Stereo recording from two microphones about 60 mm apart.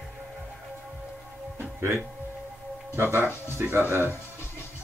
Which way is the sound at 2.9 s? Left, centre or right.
Right.